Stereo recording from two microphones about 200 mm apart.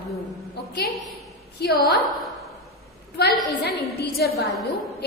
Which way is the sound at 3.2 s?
55° left (ahead or behind).